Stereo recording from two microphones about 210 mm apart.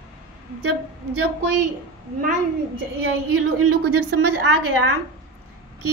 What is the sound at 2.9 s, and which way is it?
A woman's voice, 85° right.